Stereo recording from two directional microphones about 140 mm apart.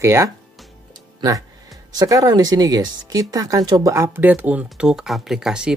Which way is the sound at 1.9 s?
25° right (ahead or behind).